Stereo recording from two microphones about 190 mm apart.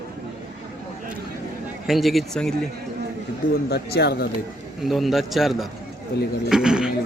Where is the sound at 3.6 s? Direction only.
55° left (ahead or behind).